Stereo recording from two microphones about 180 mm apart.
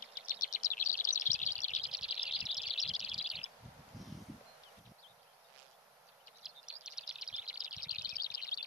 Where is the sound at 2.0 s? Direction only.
35° left (ahead or behind).